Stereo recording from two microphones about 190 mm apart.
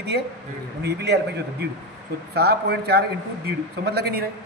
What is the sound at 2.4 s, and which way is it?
Speech, 60° right (ahead or behind).